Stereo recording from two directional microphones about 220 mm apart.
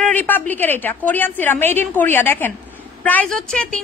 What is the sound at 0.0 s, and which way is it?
A woman's voice, 5° left (ahead or behind).